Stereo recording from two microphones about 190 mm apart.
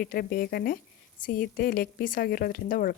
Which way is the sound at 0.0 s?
55° left (ahead or behind).